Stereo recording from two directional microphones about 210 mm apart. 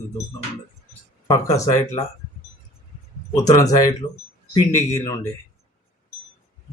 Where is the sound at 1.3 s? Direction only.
15° left (ahead or behind).